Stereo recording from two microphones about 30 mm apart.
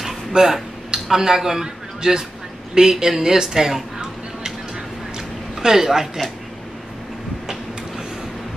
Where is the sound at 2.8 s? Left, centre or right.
Centre.